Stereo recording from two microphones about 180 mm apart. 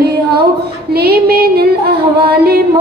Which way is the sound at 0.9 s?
60° right (ahead or behind).